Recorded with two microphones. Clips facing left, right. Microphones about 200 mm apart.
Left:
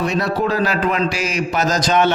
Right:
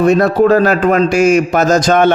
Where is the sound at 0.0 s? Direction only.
50° right (ahead or behind).